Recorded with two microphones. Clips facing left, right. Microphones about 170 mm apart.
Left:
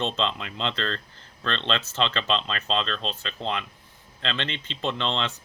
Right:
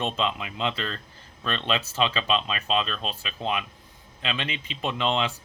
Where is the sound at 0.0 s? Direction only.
10° right (ahead or behind).